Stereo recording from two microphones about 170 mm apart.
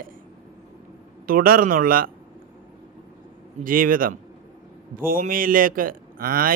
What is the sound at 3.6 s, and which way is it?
A man's voice, 55° right (ahead or behind).